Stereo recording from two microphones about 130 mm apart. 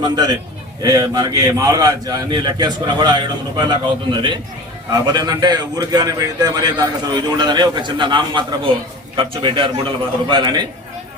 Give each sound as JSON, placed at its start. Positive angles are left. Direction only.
{"t": 0.0, "sound": "a man's voice", "side_deg": -30}